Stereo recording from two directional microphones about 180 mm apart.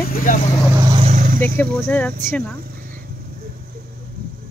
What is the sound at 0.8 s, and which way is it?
Speech, 25° right (ahead or behind).